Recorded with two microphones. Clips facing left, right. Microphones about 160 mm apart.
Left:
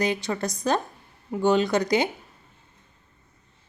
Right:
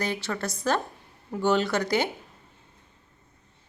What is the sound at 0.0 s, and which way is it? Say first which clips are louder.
Speech: left 4 dB; 15° left (ahead or behind).